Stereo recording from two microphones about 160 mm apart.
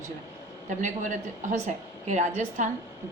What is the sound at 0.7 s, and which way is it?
A woman's voice, 50° right (ahead or behind).